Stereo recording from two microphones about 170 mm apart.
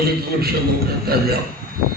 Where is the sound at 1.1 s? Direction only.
65° right (ahead or behind).